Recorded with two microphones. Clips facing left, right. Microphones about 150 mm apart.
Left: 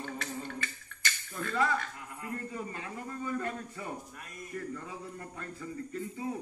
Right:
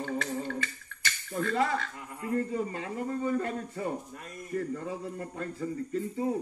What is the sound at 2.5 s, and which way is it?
Speech, 30° right (ahead or behind).